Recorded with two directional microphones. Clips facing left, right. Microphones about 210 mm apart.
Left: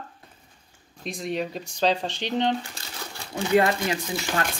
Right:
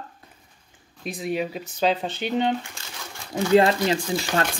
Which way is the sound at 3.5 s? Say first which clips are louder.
Right 3 dB; 30° right (ahead or behind).